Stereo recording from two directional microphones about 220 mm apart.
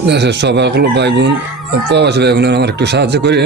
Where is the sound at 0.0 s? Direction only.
50° right (ahead or behind).